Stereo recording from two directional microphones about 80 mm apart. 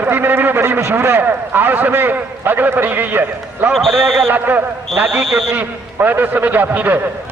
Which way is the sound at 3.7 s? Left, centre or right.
Centre.